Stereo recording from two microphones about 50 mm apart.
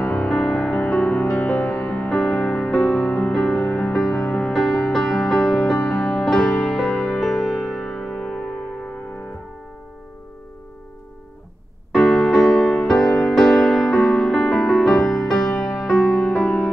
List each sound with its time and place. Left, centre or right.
0.0 s music: left
0.5 s music: left; by 4.3 s centre
4.3 s music: centre
6.4 s music: left; by 8.5 s centre
11.9 s music: centre